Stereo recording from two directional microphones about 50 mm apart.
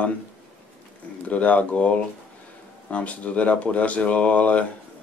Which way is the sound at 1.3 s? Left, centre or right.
Left.